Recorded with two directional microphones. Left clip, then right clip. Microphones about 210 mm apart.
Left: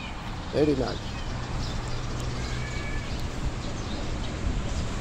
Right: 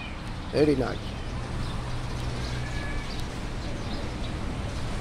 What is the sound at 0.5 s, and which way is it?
Speech, 10° right (ahead or behind).